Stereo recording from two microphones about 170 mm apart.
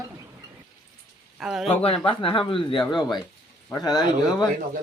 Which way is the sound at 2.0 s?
30° left (ahead or behind).